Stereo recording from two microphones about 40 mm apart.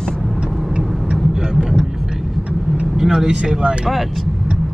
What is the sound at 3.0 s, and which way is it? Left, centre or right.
Vehicle, centre.